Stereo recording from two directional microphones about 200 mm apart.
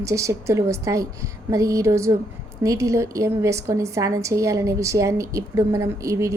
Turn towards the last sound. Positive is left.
turn(degrees=-15)  # may be behind; listen again after turning